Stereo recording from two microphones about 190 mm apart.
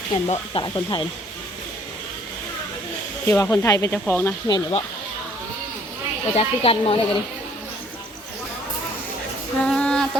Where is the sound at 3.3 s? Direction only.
15° left (ahead or behind).